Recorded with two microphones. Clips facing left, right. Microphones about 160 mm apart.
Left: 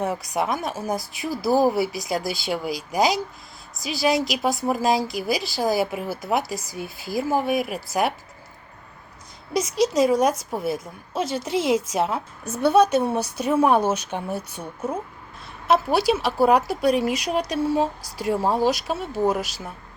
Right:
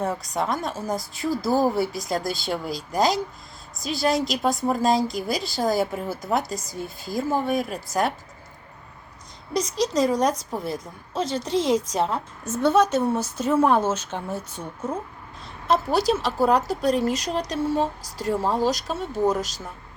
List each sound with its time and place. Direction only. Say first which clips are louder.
0.0 s a woman's voice: left 1 dB; 10° left (ahead or behind)
9.5 s a woman's voice: left 3 dB; 5° left (ahead or behind)